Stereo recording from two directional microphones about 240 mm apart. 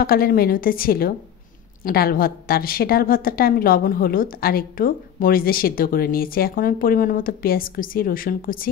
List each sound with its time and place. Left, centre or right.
0.0 s a woman's voice: left